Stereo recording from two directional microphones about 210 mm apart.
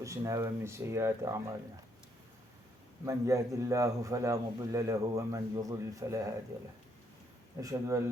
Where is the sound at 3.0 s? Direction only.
15° right (ahead or behind).